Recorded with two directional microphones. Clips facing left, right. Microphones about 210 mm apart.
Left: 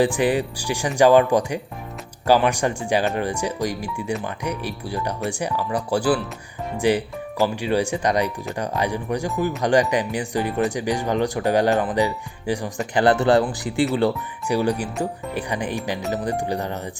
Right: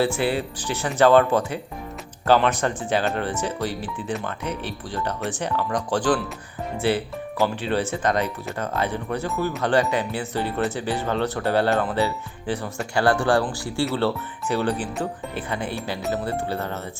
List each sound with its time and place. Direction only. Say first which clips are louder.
0.0 s speech: left 3 dB; 15° left (ahead or behind)